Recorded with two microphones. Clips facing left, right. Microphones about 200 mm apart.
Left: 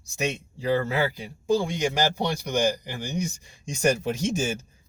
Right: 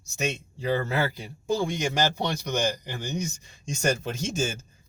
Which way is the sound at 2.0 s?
15° left (ahead or behind).